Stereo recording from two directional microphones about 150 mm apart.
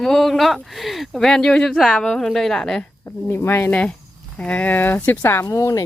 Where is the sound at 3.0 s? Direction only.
15° left (ahead or behind).